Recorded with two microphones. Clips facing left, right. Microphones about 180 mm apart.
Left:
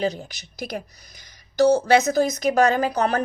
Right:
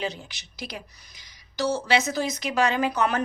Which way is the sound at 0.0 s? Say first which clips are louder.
Left 7 dB; 40° left (ahead or behind).